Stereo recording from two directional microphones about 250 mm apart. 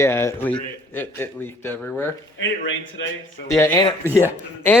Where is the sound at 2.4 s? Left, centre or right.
Left.